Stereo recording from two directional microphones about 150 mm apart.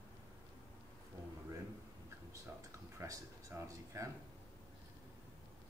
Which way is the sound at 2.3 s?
20° right (ahead or behind).